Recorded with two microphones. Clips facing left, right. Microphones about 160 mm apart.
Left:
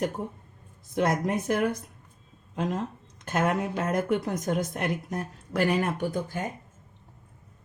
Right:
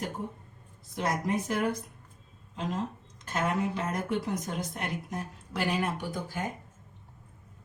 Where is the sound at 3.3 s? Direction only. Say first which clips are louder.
Left 3 dB; 55° left (ahead or behind).